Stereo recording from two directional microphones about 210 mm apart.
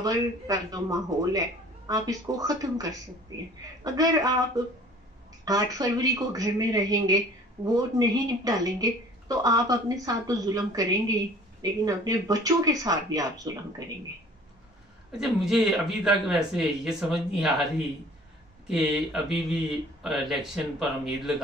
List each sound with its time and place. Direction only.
0.0 s speech: 15° right (ahead or behind)
15.1 s speech: centre (ahead or behind)